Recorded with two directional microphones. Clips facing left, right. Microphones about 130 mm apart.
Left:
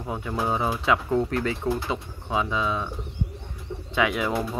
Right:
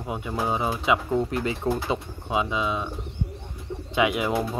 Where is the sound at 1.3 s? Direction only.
20° right (ahead or behind).